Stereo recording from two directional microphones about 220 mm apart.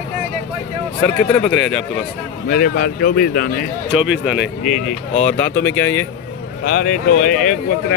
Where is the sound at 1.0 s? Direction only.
5° left (ahead or behind).